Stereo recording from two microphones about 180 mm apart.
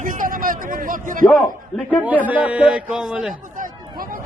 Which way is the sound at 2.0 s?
10° right (ahead or behind).